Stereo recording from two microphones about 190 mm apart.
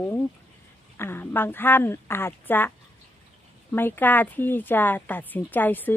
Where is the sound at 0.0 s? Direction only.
10° left (ahead or behind).